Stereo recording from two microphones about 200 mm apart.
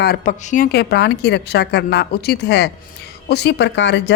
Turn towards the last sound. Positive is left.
turn(degrees=60)  # may be behind; listen again after turning